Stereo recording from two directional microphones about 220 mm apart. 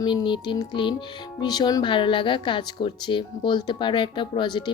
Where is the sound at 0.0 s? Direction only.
20° left (ahead or behind).